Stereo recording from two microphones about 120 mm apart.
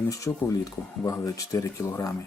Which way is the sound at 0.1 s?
30° left (ahead or behind).